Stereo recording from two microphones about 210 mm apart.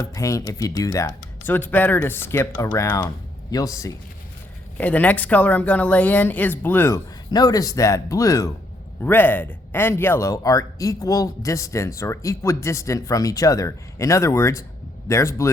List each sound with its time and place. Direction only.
0.0 s speech: 15° left (ahead or behind)